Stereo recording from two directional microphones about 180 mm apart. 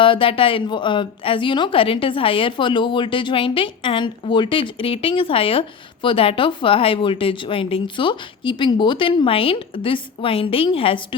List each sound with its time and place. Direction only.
0.0 s a woman's voice: 30° left (ahead or behind)